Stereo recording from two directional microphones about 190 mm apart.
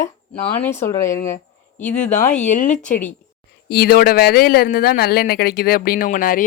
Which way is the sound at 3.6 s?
55° left (ahead or behind).